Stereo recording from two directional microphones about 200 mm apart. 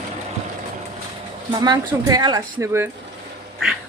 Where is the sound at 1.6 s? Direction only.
20° right (ahead or behind).